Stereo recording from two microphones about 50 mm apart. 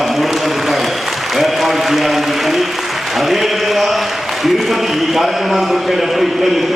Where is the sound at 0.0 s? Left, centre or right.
Centre.